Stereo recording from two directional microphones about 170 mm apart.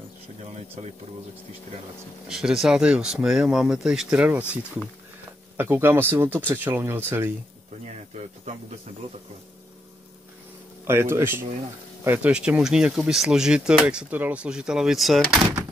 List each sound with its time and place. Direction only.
2.2 s speech: centre (ahead or behind)
5.6 s speech: 10° right (ahead or behind)
7.8 s speech: 40° right (ahead or behind)
10.9 s speech: 15° right (ahead or behind)